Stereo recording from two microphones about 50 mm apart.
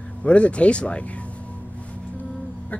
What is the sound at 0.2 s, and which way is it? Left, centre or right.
Speech, left.